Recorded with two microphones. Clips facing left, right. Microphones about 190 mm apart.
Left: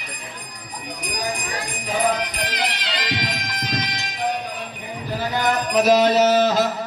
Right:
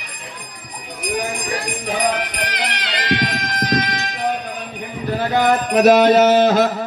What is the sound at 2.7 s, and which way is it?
Music, 60° right (ahead or behind).